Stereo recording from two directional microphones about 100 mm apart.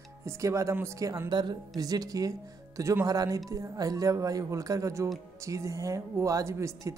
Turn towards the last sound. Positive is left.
turn(degrees=-30)  # may be behind; listen again after turning